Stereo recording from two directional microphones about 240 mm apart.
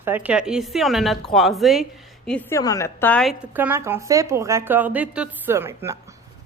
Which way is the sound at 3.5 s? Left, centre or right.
Centre.